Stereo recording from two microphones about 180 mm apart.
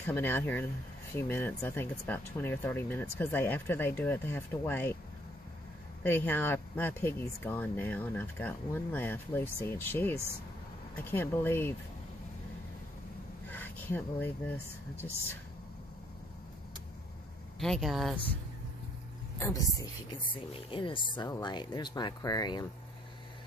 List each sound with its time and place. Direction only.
0.0 s speech: 10° left (ahead or behind)
6.0 s speech: 10° left (ahead or behind)
13.5 s speech: 10° left (ahead or behind)
17.6 s speech: centre (ahead or behind)
19.4 s a woman's voice: 20° left (ahead or behind)